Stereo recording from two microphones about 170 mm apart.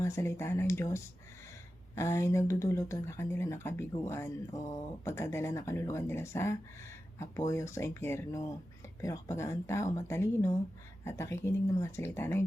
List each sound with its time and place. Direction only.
0.0 s speech: 15° left (ahead or behind)